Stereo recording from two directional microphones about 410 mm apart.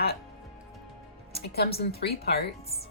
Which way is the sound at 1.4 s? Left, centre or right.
Left.